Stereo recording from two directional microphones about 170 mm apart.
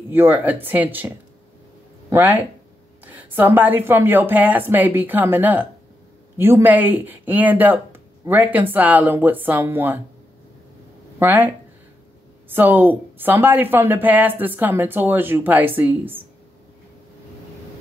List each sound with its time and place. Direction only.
0.1 s a woman's voice: 10° right (ahead or behind)
11.1 s a woman's voice: 10° right (ahead or behind)
12.5 s a woman's voice: 10° right (ahead or behind)